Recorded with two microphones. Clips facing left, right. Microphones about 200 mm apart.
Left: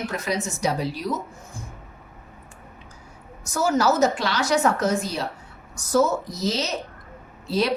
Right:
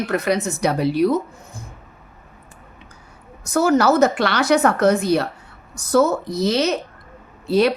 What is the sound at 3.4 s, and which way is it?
A woman's voice, 60° right (ahead or behind).